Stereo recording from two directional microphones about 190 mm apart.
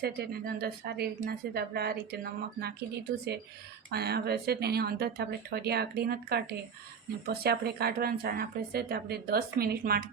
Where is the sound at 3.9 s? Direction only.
55° right (ahead or behind).